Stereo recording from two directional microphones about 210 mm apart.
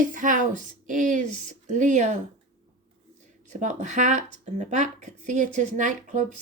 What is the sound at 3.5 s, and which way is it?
Speech, 35° right (ahead or behind).